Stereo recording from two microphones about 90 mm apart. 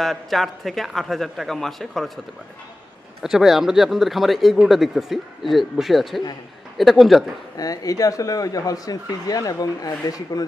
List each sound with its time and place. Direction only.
0.0 s speech: centre (ahead or behind)
3.2 s speech: centre (ahead or behind)
7.5 s speech: 45° left (ahead or behind)